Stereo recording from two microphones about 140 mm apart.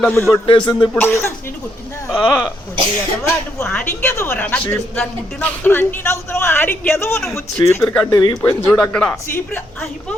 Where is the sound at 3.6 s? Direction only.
15° left (ahead or behind).